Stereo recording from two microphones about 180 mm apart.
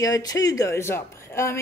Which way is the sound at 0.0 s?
20° left (ahead or behind).